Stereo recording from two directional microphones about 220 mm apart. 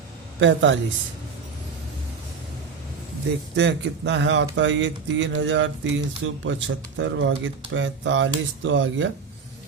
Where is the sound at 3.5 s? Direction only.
50° right (ahead or behind).